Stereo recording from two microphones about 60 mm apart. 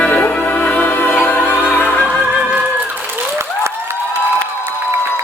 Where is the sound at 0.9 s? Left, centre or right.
Left.